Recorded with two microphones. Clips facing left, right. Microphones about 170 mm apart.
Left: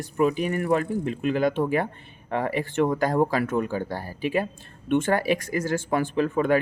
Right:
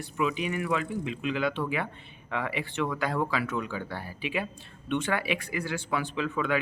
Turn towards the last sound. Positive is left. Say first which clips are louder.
# left 7 dB
turn(degrees=50)  # may be behind; listen again after turning